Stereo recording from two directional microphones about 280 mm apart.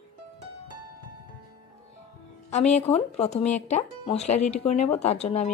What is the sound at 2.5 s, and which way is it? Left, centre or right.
Speech, left.